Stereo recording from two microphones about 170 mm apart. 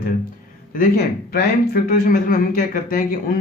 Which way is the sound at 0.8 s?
65° left (ahead or behind).